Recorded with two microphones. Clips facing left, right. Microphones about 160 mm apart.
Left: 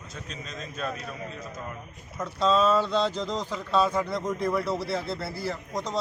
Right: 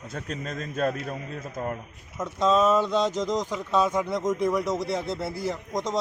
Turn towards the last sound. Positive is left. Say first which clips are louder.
# right 3 dB
turn(degrees=-20)  # may be behind; listen again after turning